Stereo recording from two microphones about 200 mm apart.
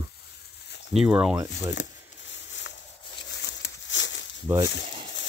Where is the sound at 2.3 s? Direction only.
65° left (ahead or behind).